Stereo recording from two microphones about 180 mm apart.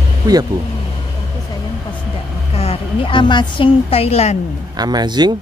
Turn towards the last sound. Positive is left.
turn(degrees=-25)  # may be behind; listen again after turning